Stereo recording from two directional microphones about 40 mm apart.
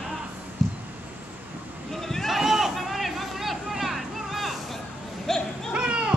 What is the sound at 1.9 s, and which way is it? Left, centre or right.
Boat, centre.